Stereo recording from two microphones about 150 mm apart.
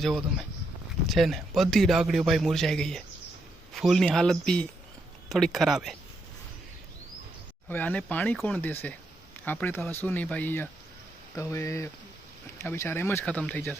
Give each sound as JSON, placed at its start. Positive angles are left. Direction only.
{"t": 0.0, "sound": "a man's voice", "side_deg": 0}
{"t": 7.7, "sound": "speech", "side_deg": 10}